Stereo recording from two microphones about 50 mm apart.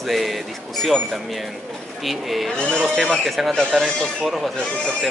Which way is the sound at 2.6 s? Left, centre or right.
Centre.